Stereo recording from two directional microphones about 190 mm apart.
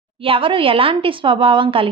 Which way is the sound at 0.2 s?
30° right (ahead or behind).